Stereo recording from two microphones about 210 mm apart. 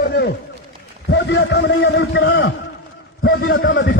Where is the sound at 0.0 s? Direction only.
50° left (ahead or behind).